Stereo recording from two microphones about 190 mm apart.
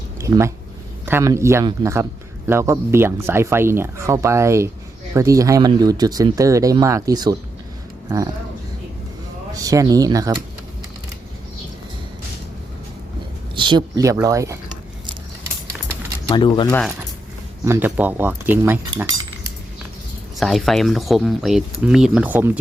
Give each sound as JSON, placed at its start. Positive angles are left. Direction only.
{"t": 0.2, "sound": "speech", "side_deg": -15}
{"t": 9.6, "sound": "speech", "side_deg": -20}
{"t": 13.6, "sound": "speech", "side_deg": -25}
{"t": 16.3, "sound": "speech", "side_deg": 25}
{"t": 17.7, "sound": "speech", "side_deg": -10}
{"t": 20.4, "sound": "speech", "side_deg": 0}